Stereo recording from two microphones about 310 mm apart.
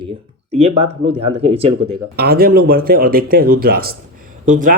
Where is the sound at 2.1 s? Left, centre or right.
Right.